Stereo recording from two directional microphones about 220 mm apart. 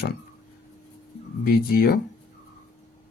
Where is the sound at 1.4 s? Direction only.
45° left (ahead or behind).